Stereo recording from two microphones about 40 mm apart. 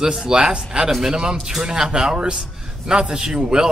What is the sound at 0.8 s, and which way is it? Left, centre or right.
A man's voice, centre.